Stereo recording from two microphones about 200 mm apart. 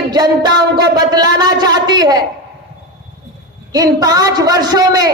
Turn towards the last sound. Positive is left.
turn(degrees=-20)  # may be behind; listen again after turning